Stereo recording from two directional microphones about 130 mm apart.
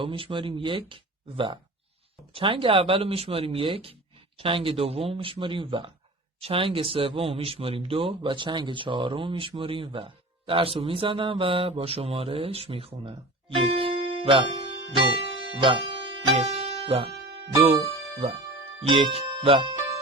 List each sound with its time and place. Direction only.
0.0 s speech: 40° right (ahead or behind)
14.9 s music: 40° right (ahead or behind)
18.9 s speech: 45° right (ahead or behind)